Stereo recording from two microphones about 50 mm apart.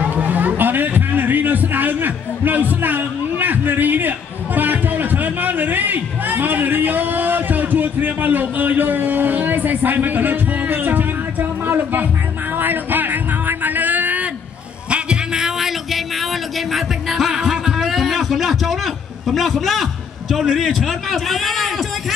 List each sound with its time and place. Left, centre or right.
0.1 s a sound: right
4.6 s music: right
14.9 s music: centre
19.2 s a man's voice: centre